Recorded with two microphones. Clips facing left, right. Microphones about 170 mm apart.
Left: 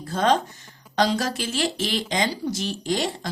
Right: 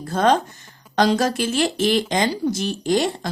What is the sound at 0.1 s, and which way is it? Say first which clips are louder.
Speech: right 3 dB; 50° right (ahead or behind).